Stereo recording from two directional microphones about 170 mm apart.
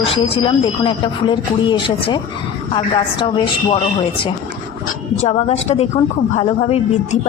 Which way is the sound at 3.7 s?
30° left (ahead or behind).